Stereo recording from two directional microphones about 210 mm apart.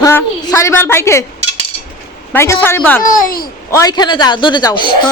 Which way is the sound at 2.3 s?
10° left (ahead or behind).